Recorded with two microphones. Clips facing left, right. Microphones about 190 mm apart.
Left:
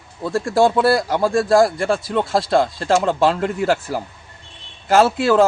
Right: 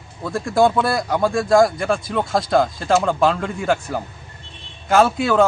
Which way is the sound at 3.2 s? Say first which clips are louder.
Left 1 dB; 35° left (ahead or behind).